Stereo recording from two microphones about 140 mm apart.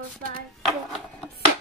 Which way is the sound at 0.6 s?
5° left (ahead or behind).